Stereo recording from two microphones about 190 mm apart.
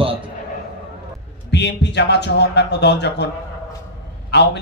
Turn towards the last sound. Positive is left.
turn(degrees=65)  # may be behind; listen again after turning